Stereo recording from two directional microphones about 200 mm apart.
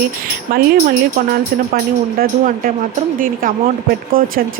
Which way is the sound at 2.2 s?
45° right (ahead or behind).